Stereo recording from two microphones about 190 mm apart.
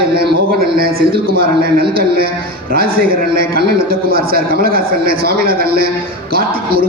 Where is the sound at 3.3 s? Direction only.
55° right (ahead or behind).